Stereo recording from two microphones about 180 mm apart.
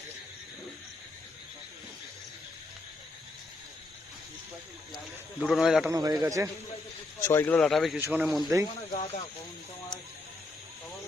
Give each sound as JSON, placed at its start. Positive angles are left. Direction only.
{"t": 5.4, "sound": "speech", "side_deg": 0}
{"t": 5.9, "sound": "a man's voice", "side_deg": -20}
{"t": 7.2, "sound": "speech", "side_deg": 15}
{"t": 7.9, "sound": "speech", "side_deg": -10}
{"t": 8.9, "sound": "speech", "side_deg": 40}